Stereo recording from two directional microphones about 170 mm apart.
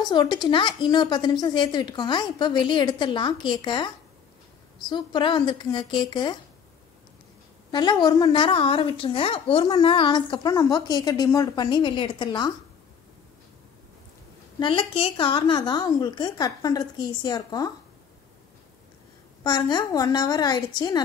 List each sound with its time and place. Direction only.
0.0 s a woman's voice: 25° left (ahead or behind)
7.7 s a woman's voice: 25° left (ahead or behind)
14.6 s a woman's voice: 30° left (ahead or behind)
19.4 s a woman's voice: 25° left (ahead or behind)